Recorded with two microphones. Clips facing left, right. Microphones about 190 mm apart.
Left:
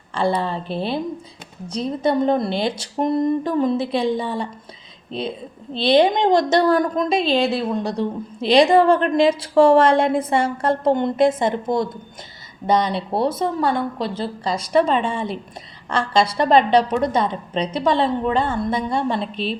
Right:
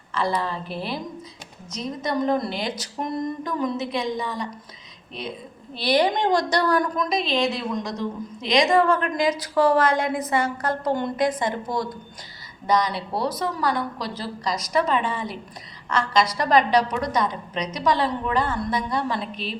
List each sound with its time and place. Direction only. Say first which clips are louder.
0.1 s a woman's voice: left 4 dB; 30° left (ahead or behind)